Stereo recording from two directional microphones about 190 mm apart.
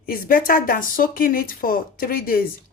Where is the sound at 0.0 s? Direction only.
50° left (ahead or behind).